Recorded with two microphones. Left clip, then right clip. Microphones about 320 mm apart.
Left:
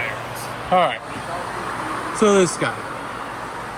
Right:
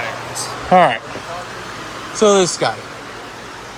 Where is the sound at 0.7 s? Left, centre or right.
Right.